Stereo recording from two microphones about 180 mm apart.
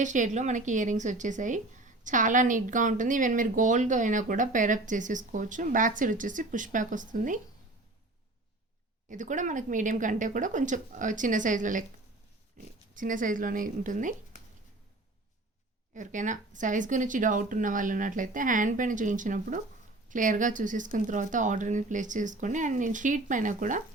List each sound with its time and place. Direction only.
0.0 s a woman's voice: 45° right (ahead or behind)
9.0 s a woman's voice: 45° right (ahead or behind)
12.9 s a woman's voice: 45° right (ahead or behind)
16.0 s a woman's voice: 45° right (ahead or behind)